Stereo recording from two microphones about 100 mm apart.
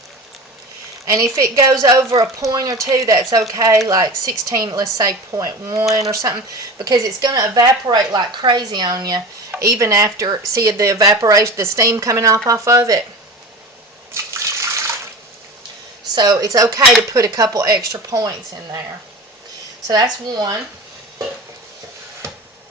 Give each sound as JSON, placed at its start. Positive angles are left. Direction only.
{"t": 1.0, "sound": "a woman's voice", "side_deg": -35}
{"t": 14.1, "sound": "water", "side_deg": -30}
{"t": 16.1, "sound": "speech", "side_deg": -45}
{"t": 19.9, "sound": "speech", "side_deg": -40}